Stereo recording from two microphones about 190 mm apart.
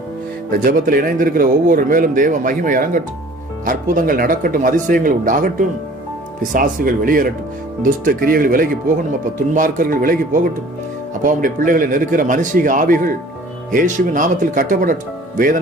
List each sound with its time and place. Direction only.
0.5 s speech: 50° right (ahead or behind)